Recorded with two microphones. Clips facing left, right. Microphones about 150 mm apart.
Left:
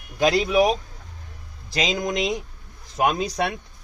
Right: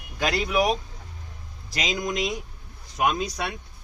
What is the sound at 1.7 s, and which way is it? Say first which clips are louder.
Speech: left 4 dB; 25° left (ahead or behind).